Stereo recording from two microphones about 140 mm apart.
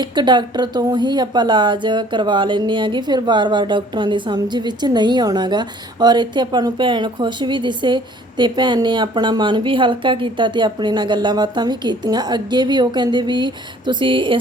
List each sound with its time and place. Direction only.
0.0 s speech: 35° right (ahead or behind)